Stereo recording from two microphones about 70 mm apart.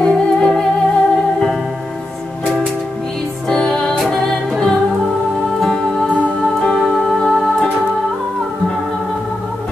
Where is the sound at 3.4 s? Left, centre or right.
Centre.